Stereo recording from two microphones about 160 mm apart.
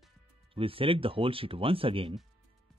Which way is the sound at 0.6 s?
35° right (ahead or behind).